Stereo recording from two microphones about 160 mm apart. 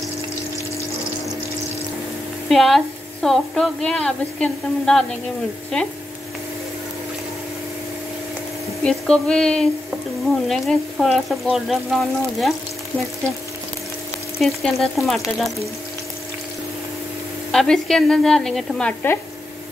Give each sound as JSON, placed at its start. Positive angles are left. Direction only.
{"t": 2.5, "sound": "a woman's voice", "side_deg": 0}
{"t": 8.8, "sound": "a woman's voice", "side_deg": 5}
{"t": 14.4, "sound": "a woman's voice", "side_deg": 0}
{"t": 17.5, "sound": "a woman's voice", "side_deg": 0}